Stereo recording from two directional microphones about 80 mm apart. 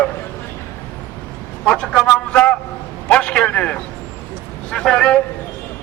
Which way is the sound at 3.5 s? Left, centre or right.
Centre.